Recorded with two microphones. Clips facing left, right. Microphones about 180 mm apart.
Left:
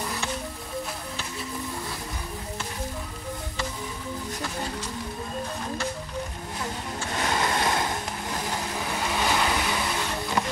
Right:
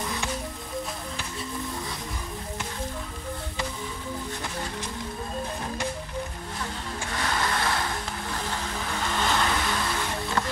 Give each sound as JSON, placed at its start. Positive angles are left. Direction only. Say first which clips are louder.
{"t": 7.1, "sound": "vehicle", "louder": "left 2 dB", "side_deg": 20}
{"t": 10.4, "sound": "music", "louder": "left 1 dB", "side_deg": 15}